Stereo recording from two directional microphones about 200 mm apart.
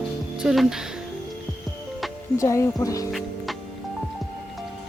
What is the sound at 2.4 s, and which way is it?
Speech, 15° left (ahead or behind).